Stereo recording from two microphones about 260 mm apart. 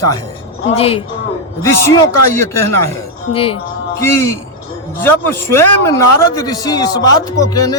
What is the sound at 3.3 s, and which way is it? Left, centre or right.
A woman's voice, left.